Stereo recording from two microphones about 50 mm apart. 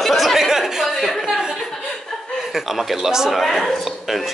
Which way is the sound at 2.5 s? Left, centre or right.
Centre.